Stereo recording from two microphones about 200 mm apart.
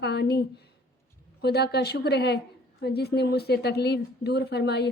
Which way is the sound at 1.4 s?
55° left (ahead or behind).